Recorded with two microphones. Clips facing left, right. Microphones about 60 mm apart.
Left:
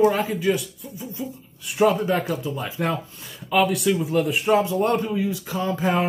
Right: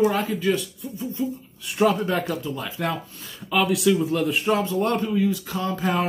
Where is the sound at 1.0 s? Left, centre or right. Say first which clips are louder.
Right 5 dB; centre.